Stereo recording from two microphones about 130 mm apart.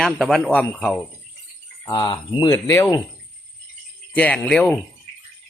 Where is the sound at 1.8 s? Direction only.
30° left (ahead or behind).